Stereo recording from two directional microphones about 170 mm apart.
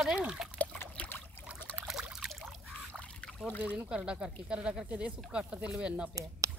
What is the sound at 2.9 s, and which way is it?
Trickle, 10° left (ahead or behind).